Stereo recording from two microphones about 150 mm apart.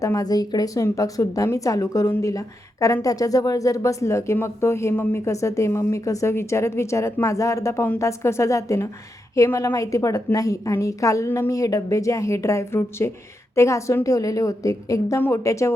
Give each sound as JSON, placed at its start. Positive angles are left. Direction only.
{"t": 0.0, "sound": "speech", "side_deg": 25}